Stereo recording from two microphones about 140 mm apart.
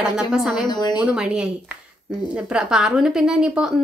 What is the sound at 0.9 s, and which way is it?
A woman's voice, 5° right (ahead or behind).